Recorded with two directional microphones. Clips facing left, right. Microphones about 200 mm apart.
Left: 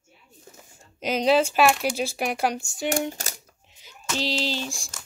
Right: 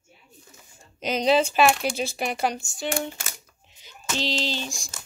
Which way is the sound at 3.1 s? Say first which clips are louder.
Left 3 dB; 40° left (ahead or behind).